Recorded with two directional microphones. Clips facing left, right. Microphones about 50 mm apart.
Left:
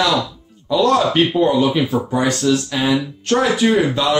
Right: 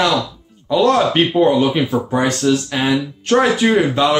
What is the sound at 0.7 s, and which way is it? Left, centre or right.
Speech, right.